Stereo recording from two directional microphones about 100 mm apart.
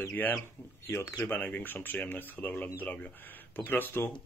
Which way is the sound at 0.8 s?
25° left (ahead or behind).